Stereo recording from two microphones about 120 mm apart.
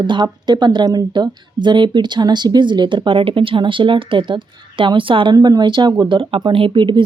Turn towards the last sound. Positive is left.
turn(degrees=-45)  # may be behind; listen again after turning